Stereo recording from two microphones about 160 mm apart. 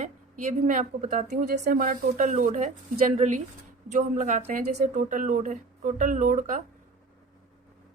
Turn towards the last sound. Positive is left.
turn(degrees=-55)  # may be behind; listen again after turning